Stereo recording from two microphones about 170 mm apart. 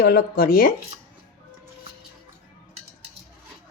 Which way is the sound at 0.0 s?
60° left (ahead or behind).